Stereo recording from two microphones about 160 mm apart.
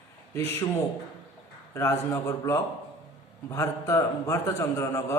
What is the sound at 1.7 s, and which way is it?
A man's voice, 15° left (ahead or behind).